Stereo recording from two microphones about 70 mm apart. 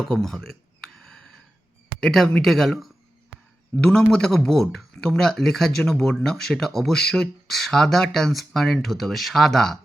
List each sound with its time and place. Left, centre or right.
0.0 s a sound: centre
2.0 s speech: centre
3.8 s speech: centre